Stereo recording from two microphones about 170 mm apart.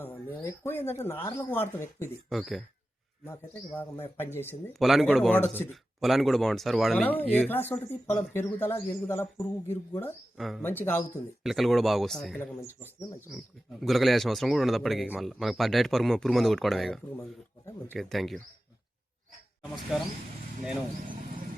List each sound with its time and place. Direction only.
0.0 s speech: 15° left (ahead or behind)
2.3 s speech: centre (ahead or behind)
3.2 s speech: 10° left (ahead or behind)
4.7 s speech: centre (ahead or behind)
5.7 s speech: centre (ahead or behind)
10.3 s speech: centre (ahead or behind)
10.6 s speech: 10° left (ahead or behind)
11.4 s speech: centre (ahead or behind)
12.5 s speech: 15° left (ahead or behind)
13.3 s speech: centre (ahead or behind)
19.9 s speech: centre (ahead or behind)